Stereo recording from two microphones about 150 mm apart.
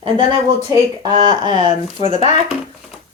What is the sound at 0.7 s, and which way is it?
Speech, 20° right (ahead or behind).